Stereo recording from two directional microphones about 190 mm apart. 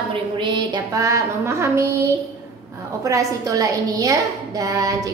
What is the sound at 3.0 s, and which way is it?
A woman's voice, 15° right (ahead or behind).